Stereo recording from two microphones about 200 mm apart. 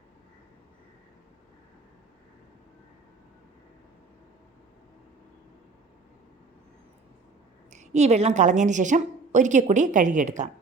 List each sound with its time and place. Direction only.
7.7 s a woman's voice: 35° right (ahead or behind)